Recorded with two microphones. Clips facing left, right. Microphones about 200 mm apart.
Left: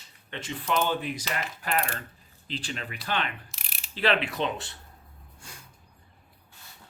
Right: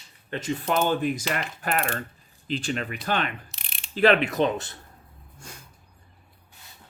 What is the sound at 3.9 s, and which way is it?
Speech, 45° right (ahead or behind).